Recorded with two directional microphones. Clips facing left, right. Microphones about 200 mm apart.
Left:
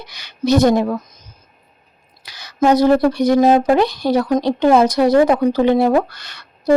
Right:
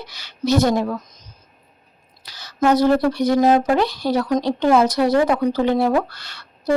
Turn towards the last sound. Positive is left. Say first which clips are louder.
# left 4 dB
turn(degrees=15)  # may be behind; listen again after turning